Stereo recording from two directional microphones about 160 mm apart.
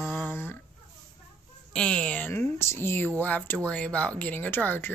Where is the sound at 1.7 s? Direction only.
5° left (ahead or behind).